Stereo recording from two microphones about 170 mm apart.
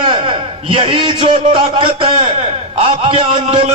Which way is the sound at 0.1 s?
30° right (ahead or behind).